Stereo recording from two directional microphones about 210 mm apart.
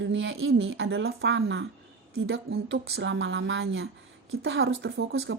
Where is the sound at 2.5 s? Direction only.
60° right (ahead or behind).